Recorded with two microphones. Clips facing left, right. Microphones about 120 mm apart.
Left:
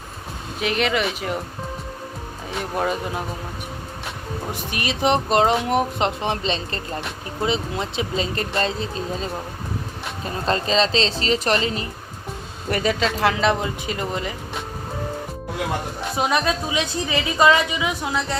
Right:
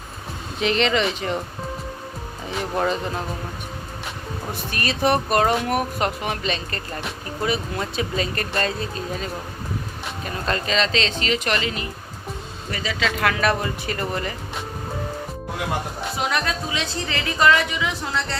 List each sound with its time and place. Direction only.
0.6 s speech: 5° left (ahead or behind)
2.5 s speech: 5° left (ahead or behind)
4.5 s speech: 15° left (ahead or behind); by 11.9 s 35° left (ahead or behind)
12.7 s speech: 50° left (ahead or behind)
13.1 s speech: 25° left (ahead or behind)
16.1 s speech: 20° left (ahead or behind)